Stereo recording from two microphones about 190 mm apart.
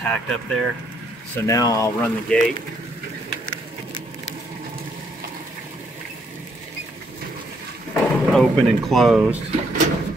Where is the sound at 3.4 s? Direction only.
20° left (ahead or behind).